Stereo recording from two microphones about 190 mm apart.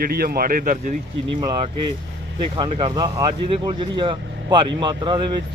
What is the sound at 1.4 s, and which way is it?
Speech, 20° right (ahead or behind).